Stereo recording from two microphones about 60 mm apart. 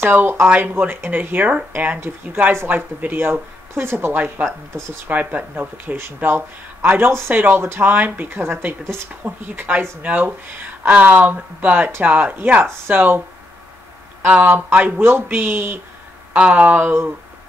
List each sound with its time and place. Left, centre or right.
0.0 s speech: right
9.1 s speech: right
14.2 s speech: right
16.3 s speech: right